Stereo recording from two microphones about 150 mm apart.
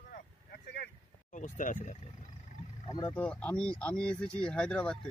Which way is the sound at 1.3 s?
60° left (ahead or behind).